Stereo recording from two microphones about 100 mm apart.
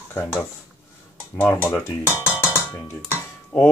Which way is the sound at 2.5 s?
25° left (ahead or behind).